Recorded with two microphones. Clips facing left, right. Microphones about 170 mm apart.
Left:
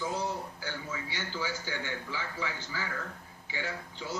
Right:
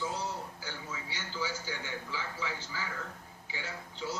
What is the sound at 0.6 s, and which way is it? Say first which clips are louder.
A man's voice: left 4 dB; 60° left (ahead or behind).